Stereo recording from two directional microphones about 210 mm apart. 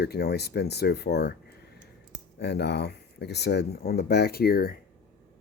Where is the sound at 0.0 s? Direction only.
50° left (ahead or behind).